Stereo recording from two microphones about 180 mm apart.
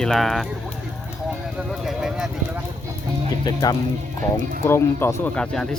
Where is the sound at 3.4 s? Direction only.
20° left (ahead or behind); by 5.7 s 5° left (ahead or behind).